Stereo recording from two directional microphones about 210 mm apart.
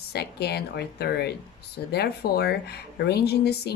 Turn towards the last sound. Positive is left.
turn(degrees=50)  # may be behind; listen again after turning